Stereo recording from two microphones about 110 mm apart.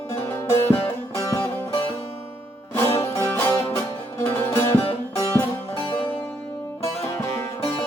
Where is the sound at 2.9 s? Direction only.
25° left (ahead or behind).